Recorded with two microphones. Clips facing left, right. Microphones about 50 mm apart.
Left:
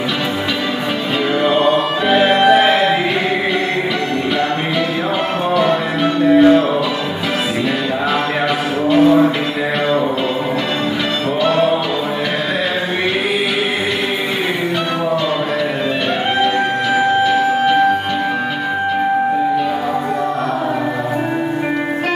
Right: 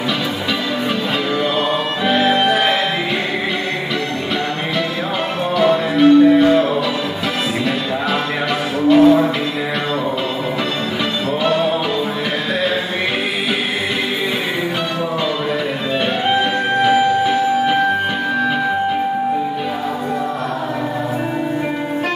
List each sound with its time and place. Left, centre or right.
1.4 s music: centre
5.9 s music: centre
8.8 s music: centre
16.8 s music: centre